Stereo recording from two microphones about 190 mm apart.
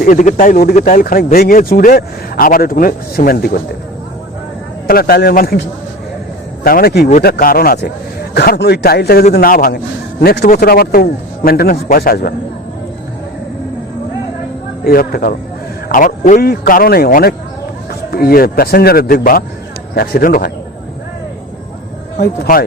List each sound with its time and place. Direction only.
0.0 s speech: 45° left (ahead or behind)
4.9 s speech: 55° left (ahead or behind)
6.7 s a man's voice: 55° left (ahead or behind)
14.8 s speech: 50° left (ahead or behind)
22.2 s speech: 50° left (ahead or behind)